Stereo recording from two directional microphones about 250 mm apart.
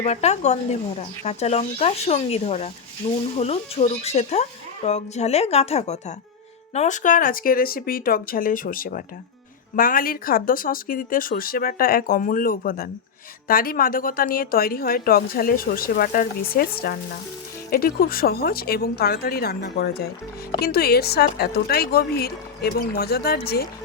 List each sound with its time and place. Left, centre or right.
0.0 s speech: left